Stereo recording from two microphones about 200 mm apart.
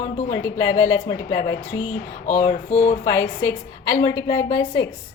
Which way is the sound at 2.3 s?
30° left (ahead or behind).